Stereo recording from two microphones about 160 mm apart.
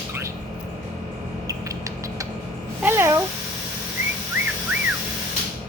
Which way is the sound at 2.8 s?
15° right (ahead or behind).